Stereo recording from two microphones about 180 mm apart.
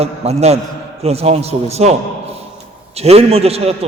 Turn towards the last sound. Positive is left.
turn(degrees=-35)  # may be behind; listen again after turning